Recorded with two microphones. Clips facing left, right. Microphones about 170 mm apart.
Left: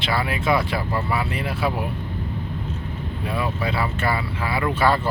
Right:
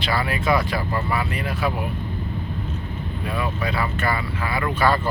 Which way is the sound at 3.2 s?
25° left (ahead or behind).